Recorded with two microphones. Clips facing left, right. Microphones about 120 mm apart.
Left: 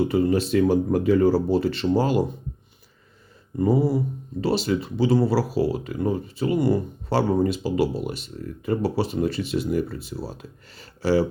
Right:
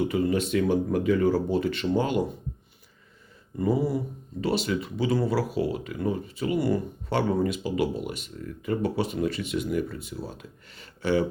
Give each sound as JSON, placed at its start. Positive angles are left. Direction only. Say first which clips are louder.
{"t": 0.0, "sound": "speech", "louder": "left 4 dB", "side_deg": 30}
{"t": 3.6, "sound": "speech", "louder": "left 4 dB", "side_deg": 30}